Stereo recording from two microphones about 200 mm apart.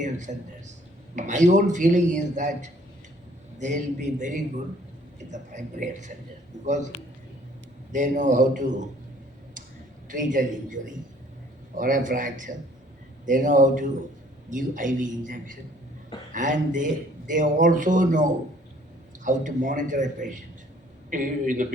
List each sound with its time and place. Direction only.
0.0 s a sound: 35° right (ahead or behind)
1.1 s speech: 35° right (ahead or behind)
7.9 s speech: 40° right (ahead or behind)
10.1 s speech: 40° right (ahead or behind)